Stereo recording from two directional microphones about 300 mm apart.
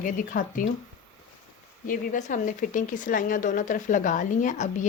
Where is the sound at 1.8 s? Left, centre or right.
Left.